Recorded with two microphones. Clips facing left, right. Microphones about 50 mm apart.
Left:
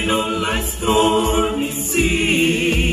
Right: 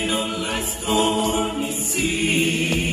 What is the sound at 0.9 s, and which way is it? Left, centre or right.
Music, left.